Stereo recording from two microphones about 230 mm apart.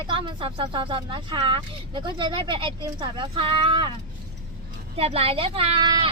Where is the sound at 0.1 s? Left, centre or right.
Right.